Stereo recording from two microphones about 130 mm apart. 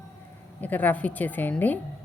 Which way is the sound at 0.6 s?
10° left (ahead or behind).